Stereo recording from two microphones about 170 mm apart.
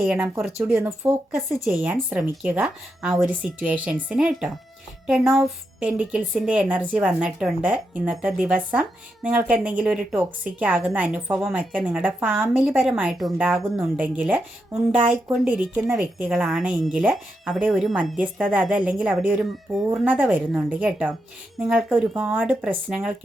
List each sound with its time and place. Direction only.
0.0 s speech: 5° right (ahead or behind)
0.7 s a woman's voice: 15° right (ahead or behind)